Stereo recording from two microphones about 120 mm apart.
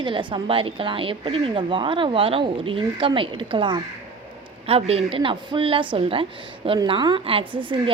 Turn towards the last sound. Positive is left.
turn(degrees=-45)  # may be behind; listen again after turning